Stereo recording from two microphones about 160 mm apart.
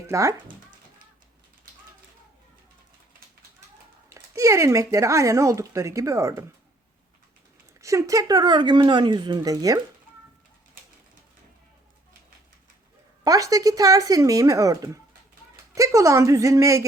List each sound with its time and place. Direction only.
0.1 s speech: 20° right (ahead or behind)
4.1 s speech: 20° right (ahead or behind)
7.8 s speech: 20° right (ahead or behind)
13.2 s speech: 20° right (ahead or behind)